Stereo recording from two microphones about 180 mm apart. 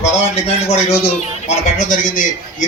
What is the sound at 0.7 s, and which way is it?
A man's voice, 40° left (ahead or behind).